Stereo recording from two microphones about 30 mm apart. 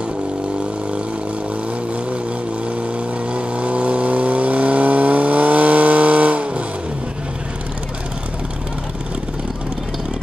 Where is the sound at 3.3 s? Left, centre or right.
Right.